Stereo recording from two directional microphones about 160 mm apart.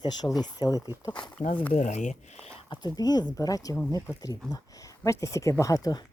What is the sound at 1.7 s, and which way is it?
Speech, 50° left (ahead or behind).